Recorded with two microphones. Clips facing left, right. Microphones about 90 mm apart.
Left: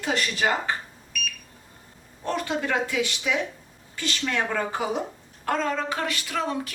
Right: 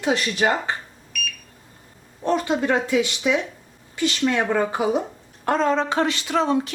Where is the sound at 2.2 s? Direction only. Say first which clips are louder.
Right 6 dB; 20° right (ahead or behind).